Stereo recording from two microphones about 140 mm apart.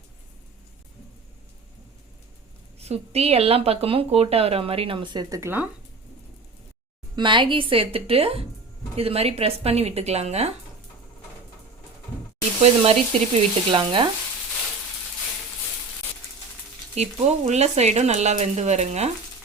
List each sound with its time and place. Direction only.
2.7 s speech: 50° right (ahead or behind); by 5.4 s 35° right (ahead or behind)
5.4 s speech: 15° right (ahead or behind)
7.2 s a woman's voice: 35° right (ahead or behind)
12.6 s speech: 45° right (ahead or behind)
16.9 s speech: 50° right (ahead or behind)